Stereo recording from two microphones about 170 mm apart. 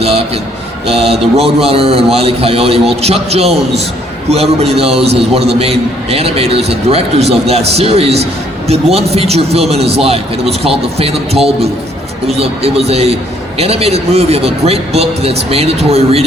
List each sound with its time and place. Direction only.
0.9 s a man's voice: 35° right (ahead or behind)
12.4 s a man's voice: 35° right (ahead or behind)